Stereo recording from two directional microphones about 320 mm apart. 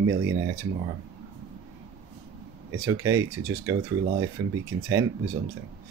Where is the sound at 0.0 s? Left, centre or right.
Right.